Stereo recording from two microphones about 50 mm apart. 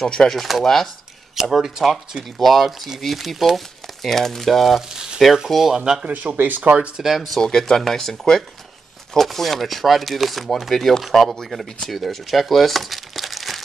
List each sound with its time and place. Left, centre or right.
0.0 s speech: centre
0.4 s speech: centre
4.9 s speech: centre
6.0 s speech: right
7.0 s speech: centre
7.3 s speech: centre